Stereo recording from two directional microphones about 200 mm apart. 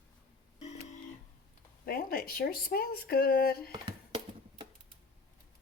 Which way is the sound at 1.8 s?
45° left (ahead or behind).